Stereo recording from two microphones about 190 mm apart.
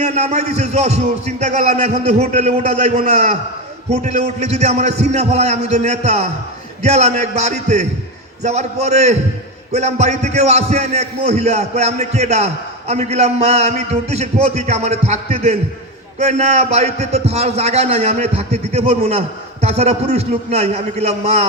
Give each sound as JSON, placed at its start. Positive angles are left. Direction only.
{"t": 0.0, "sound": "a man's voice", "side_deg": -35}